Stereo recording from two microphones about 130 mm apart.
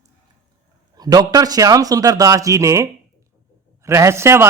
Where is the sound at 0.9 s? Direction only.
30° right (ahead or behind).